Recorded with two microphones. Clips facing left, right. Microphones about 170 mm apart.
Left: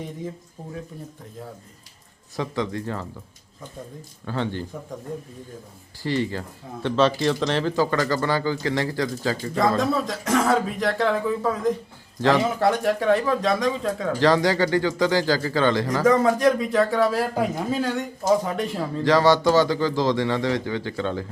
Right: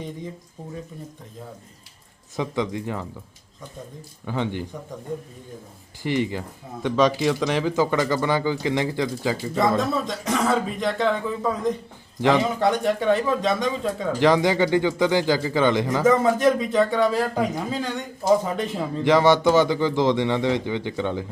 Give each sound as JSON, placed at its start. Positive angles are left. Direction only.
{"t": 2.3, "sound": "speech", "side_deg": -15}
{"t": 4.3, "sound": "speech", "side_deg": -15}
{"t": 6.0, "sound": "speech", "side_deg": -15}
{"t": 9.7, "sound": "speech", "side_deg": 0}
{"t": 14.2, "sound": "speech", "side_deg": -15}
{"t": 16.0, "sound": "speech", "side_deg": 0}
{"t": 17.9, "sound": "speech", "side_deg": 0}
{"t": 19.0, "sound": "a man's voice", "side_deg": -20}